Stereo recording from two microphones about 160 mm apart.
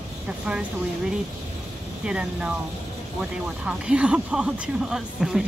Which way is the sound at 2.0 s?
5° right (ahead or behind).